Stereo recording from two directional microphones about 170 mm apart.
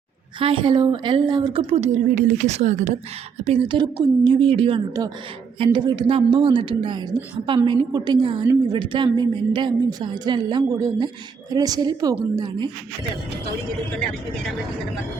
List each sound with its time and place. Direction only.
0.3 s a woman's voice: 30° right (ahead or behind)